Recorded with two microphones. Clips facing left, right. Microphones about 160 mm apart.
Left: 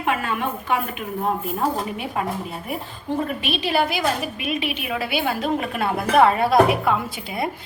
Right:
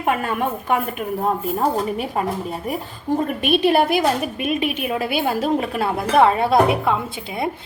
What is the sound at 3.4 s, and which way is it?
A woman's voice, 50° right (ahead or behind).